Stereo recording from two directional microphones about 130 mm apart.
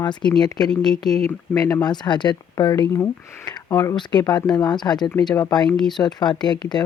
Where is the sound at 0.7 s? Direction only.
5° left (ahead or behind).